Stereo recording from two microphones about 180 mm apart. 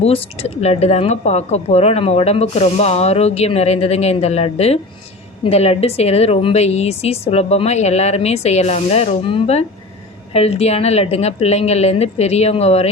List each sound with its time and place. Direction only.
0.0 s speech: 35° left (ahead or behind)